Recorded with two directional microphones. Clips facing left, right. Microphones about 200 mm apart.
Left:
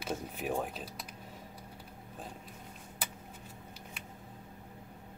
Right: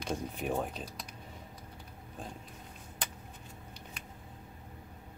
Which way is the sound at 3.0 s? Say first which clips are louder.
Right 1 dB; 5° left (ahead or behind).